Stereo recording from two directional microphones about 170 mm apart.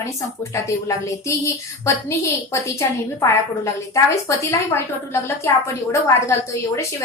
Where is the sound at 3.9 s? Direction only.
20° left (ahead or behind).